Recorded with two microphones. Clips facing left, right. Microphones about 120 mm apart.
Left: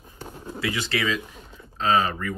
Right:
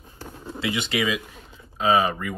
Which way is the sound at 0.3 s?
10° left (ahead or behind).